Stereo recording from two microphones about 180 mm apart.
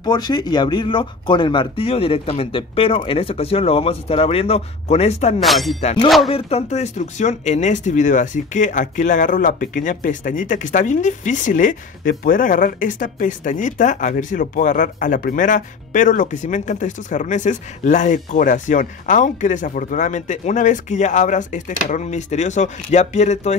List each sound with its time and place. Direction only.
0.0 s speech: 25° left (ahead or behind)
5.4 s speech: centre (ahead or behind)
5.8 s speech: 35° left (ahead or behind)
6.0 s speech: centre (ahead or behind)
6.3 s speech: 35° left (ahead or behind)